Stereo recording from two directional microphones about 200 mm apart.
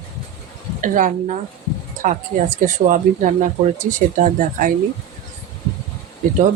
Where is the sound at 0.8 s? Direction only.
40° right (ahead or behind).